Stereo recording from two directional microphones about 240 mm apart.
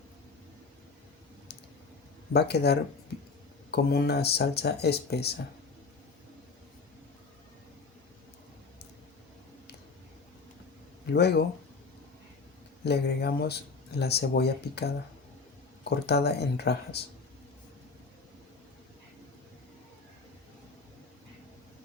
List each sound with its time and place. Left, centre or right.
2.3 s speech: left
11.1 s speech: left
12.8 s speech: left